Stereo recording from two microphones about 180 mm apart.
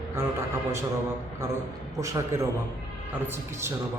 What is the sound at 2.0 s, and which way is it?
Speech, 15° right (ahead or behind).